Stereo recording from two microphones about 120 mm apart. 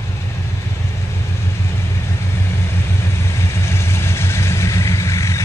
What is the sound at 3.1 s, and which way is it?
Vehicle, 20° left (ahead or behind).